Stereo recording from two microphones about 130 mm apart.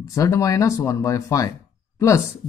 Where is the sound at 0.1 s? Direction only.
25° left (ahead or behind).